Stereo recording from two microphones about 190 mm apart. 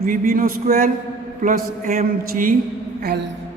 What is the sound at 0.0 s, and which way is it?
A man's voice, 50° right (ahead or behind).